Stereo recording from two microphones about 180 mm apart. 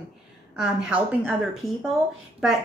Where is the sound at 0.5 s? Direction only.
5° right (ahead or behind).